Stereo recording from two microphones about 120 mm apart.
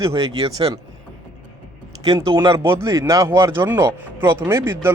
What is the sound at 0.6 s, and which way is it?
Speech, 50° right (ahead or behind).